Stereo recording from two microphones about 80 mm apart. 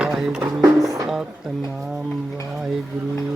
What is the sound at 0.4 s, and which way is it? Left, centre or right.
Music, right.